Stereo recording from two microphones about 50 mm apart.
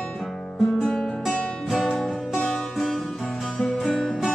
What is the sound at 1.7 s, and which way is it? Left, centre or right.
Music, centre.